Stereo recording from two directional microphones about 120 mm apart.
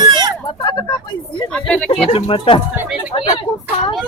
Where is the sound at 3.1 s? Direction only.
50° left (ahead or behind).